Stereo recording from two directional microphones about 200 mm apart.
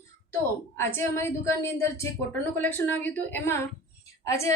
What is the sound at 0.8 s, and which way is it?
A woman's voice, 10° left (ahead or behind).